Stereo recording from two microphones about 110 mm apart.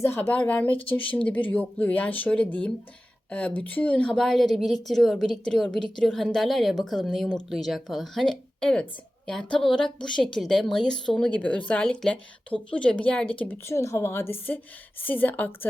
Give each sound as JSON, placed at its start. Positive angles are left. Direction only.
{"t": 0.0, "sound": "a woman's voice", "side_deg": 20}
{"t": 13.7, "sound": "a woman's voice", "side_deg": 25}